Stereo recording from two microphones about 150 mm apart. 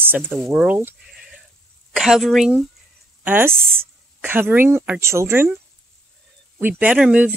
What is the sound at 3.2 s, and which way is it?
Speech, 10° right (ahead or behind).